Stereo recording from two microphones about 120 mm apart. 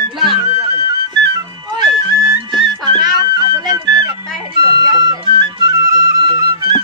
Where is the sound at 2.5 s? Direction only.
45° right (ahead or behind).